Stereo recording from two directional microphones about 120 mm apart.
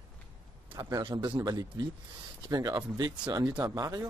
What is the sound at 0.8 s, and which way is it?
Speech, 35° right (ahead or behind).